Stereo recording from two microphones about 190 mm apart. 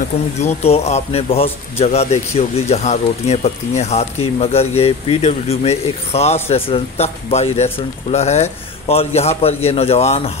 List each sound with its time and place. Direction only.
0.4 s a man's voice: 35° left (ahead or behind)